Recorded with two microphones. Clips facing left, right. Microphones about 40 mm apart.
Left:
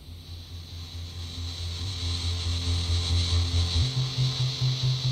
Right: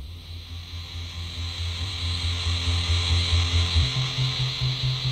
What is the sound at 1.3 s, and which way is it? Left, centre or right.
Music, right.